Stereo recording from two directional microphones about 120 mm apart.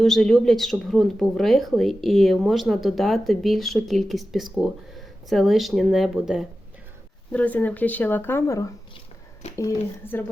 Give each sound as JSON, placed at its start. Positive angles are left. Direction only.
{"t": 0.0, "sound": "speech", "side_deg": 5}
{"t": 7.3, "sound": "speech", "side_deg": 15}